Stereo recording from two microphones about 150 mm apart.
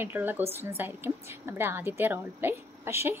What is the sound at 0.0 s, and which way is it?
A woman's voice, 15° right (ahead or behind).